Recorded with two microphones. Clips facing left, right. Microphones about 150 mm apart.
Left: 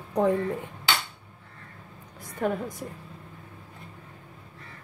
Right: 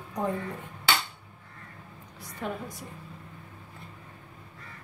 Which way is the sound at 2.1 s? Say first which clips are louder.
Left 7 dB; 50° left (ahead or behind).